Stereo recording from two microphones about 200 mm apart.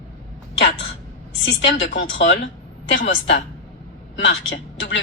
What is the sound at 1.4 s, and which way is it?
Speech, 65° left (ahead or behind).